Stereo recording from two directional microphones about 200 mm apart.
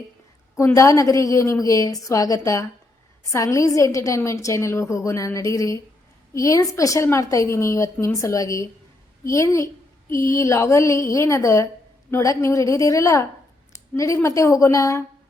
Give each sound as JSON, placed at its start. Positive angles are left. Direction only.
{"t": 0.5, "sound": "a woman's voice", "side_deg": 15}